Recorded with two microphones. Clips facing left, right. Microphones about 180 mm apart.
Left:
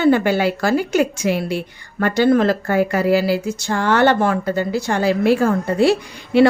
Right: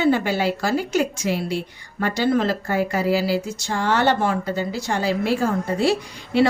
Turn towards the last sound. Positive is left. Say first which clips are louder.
# left 5 dB
turn(degrees=60)  # may be behind; listen again after turning